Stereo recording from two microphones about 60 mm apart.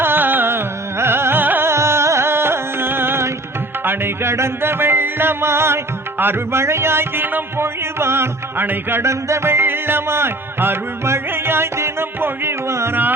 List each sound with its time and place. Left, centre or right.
0.0 s music: right
9.0 s music: right
12.9 s music: right